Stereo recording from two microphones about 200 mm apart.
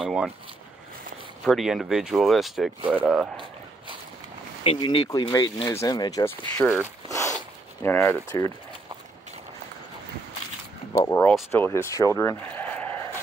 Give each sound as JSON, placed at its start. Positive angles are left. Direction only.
{"t": 0.0, "sound": "speech", "side_deg": 0}
{"t": 1.4, "sound": "speech", "side_deg": 0}
{"t": 4.6, "sound": "speech", "side_deg": 25}
{"t": 11.1, "sound": "speech", "side_deg": 10}
{"t": 12.2, "sound": "a sound", "side_deg": 10}